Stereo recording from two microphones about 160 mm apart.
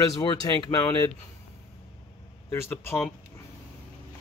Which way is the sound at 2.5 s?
15° left (ahead or behind).